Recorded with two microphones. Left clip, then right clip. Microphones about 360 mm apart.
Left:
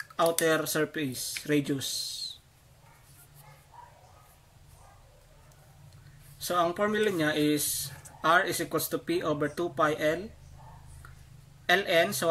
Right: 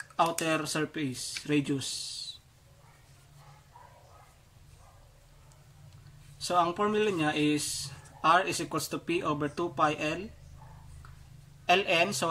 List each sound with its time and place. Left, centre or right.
0.1 s speech: centre
6.4 s speech: centre
11.6 s speech: centre